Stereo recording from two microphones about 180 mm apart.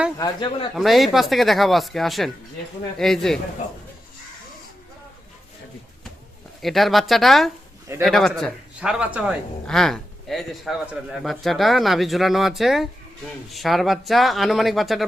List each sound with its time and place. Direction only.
0.2 s speech: 25° left (ahead or behind)
0.8 s speech: centre (ahead or behind)
6.6 s speech: centre (ahead or behind)